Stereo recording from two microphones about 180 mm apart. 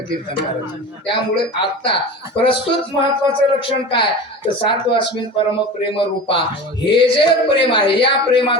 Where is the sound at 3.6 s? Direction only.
30° left (ahead or behind).